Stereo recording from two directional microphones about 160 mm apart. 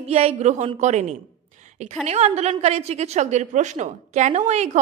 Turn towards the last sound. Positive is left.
turn(degrees=-45)  # may be behind; listen again after turning